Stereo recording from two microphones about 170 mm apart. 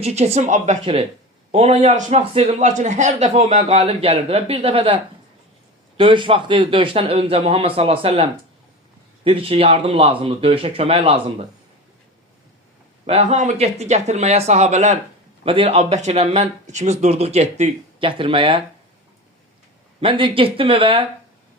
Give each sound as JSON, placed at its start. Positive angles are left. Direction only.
{"t": 0.0, "sound": "a man's voice", "side_deg": -40}
{"t": 6.0, "sound": "a man's voice", "side_deg": -30}
{"t": 13.1, "sound": "a man's voice", "side_deg": -35}
{"t": 15.4, "sound": "a man's voice", "side_deg": -30}
{"t": 20.0, "sound": "a man's voice", "side_deg": -30}